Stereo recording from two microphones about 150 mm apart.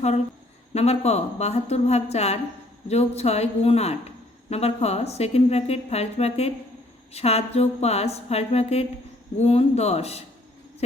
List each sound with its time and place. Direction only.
0.7 s a woman's voice: 45° left (ahead or behind)